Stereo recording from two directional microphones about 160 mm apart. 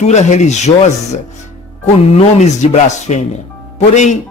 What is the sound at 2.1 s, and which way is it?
A man's voice, 45° left (ahead or behind).